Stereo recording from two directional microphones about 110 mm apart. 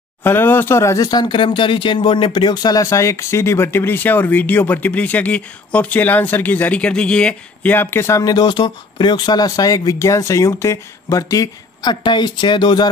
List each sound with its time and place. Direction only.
0.2 s speech: 20° left (ahead or behind); by 12.8 s 45° left (ahead or behind)